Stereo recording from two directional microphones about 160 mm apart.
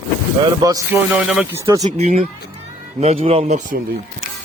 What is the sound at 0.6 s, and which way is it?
Speech, 20° right (ahead or behind).